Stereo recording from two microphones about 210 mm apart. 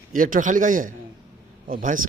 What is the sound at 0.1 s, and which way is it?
A man's voice, 40° right (ahead or behind).